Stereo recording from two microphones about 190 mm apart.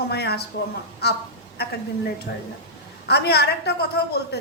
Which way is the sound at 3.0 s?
60° left (ahead or behind).